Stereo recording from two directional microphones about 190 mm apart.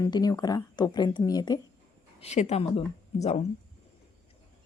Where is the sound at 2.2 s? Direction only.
35° left (ahead or behind).